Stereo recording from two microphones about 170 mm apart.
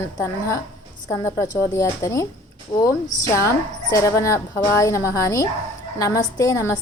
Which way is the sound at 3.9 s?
20° left (ahead or behind).